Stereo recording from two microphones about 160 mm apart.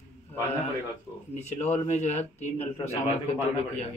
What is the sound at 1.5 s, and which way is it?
Speech, 45° left (ahead or behind).